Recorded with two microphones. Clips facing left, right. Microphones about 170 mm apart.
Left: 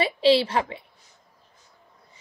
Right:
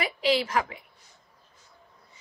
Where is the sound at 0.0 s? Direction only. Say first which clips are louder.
Left 6 dB; 30° left (ahead or behind).